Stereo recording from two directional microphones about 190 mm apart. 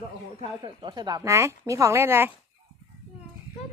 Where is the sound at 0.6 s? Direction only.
25° right (ahead or behind).